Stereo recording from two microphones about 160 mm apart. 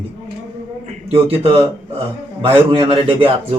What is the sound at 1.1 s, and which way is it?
Speech, 40° right (ahead or behind).